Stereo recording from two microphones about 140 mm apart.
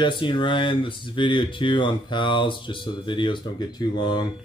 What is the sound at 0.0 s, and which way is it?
Speech, 35° left (ahead or behind).